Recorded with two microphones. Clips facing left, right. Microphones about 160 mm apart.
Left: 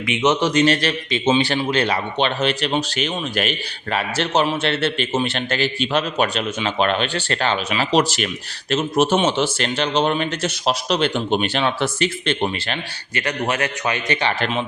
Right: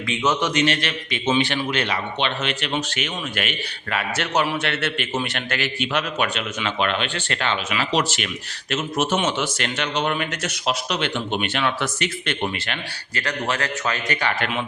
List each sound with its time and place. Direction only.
0.0 s a man's voice: 20° left (ahead or behind)
0.4 s speech: 35° left (ahead or behind)
13.1 s a man's voice: 20° left (ahead or behind)